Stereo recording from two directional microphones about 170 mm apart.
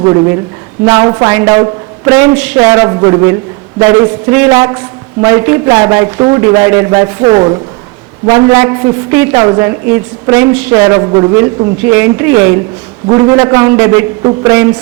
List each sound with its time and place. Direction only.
0.9 s a woman's voice: 20° right (ahead or behind)
8.3 s a woman's voice: 15° right (ahead or behind)